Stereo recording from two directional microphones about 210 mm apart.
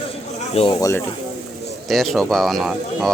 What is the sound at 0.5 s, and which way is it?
Speech, 25° left (ahead or behind).